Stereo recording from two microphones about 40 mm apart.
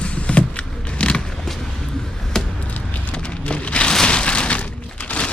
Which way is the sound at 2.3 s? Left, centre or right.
Centre.